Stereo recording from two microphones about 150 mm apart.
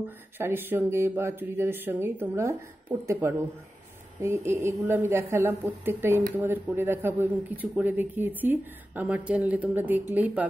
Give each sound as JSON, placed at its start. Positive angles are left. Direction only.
{"t": 0.4, "sound": "speech", "side_deg": -15}